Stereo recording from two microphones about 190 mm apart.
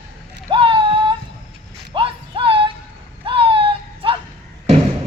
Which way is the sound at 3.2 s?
30° right (ahead or behind).